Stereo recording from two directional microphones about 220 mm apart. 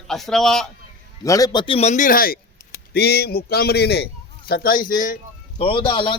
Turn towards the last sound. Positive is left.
turn(degrees=20)  # may be behind; listen again after turning